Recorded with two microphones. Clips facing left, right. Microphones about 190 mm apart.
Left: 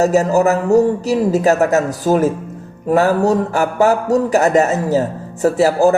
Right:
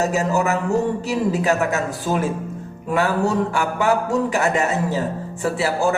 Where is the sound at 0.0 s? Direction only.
40° left (ahead or behind).